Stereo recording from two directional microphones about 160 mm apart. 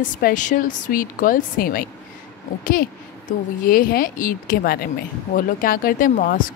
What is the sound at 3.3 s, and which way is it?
Speech, 60° left (ahead or behind).